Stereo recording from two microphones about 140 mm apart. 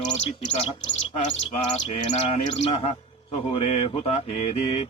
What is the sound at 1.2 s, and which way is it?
Speech, 60° left (ahead or behind).